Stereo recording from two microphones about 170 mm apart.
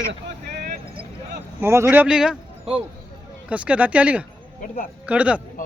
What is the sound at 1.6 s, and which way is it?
Speech, 15° right (ahead or behind).